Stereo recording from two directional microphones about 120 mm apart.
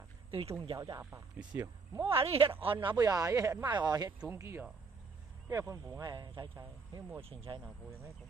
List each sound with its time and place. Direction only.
0.3 s speech: 50° right (ahead or behind)
0.7 s speech: 30° right (ahead or behind)
1.4 s speech: 10° right (ahead or behind)
2.0 s speech: 50° right (ahead or behind)
3.0 s speech: 30° right (ahead or behind)
3.6 s speech: 40° right (ahead or behind)
4.3 s speech: 20° right (ahead or behind); by 7.6 s 50° right (ahead or behind)